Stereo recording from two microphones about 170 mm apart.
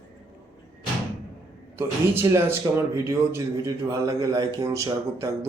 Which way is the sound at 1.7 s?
15° right (ahead or behind).